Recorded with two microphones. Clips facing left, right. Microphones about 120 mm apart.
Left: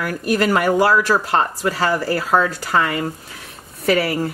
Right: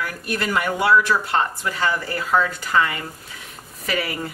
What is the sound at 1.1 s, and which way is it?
Speech, 90° left.